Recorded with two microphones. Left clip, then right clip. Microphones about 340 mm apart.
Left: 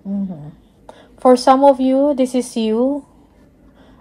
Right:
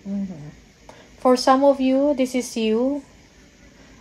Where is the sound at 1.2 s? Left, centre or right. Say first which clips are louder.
Left 6 dB; left.